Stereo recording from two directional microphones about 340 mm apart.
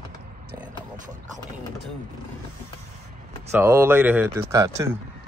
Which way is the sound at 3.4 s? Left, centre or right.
Centre.